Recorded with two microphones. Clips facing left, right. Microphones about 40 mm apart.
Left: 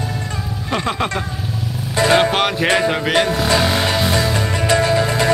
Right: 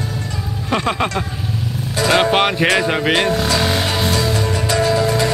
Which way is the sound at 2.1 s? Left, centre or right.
Centre.